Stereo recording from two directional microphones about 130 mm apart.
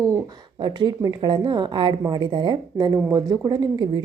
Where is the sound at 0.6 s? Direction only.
35° right (ahead or behind).